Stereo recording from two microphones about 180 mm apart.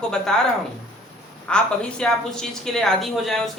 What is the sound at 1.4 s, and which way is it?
A woman's voice, 5° left (ahead or behind).